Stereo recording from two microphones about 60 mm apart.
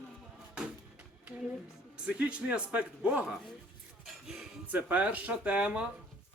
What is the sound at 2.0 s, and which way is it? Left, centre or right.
A man's voice, centre.